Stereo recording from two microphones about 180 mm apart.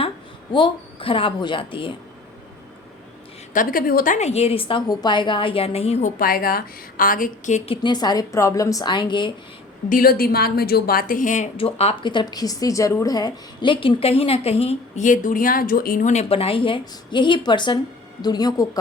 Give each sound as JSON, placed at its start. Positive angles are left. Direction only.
{"t": 0.5, "sound": "a woman's voice", "side_deg": 30}
{"t": 3.5, "sound": "a woman's voice", "side_deg": 50}
{"t": 6.1, "sound": "a woman's voice", "side_deg": 55}
{"t": 9.9, "sound": "a woman's voice", "side_deg": 55}
{"t": 11.5, "sound": "a woman's voice", "side_deg": 35}